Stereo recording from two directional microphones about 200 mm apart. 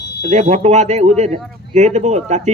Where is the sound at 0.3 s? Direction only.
35° right (ahead or behind).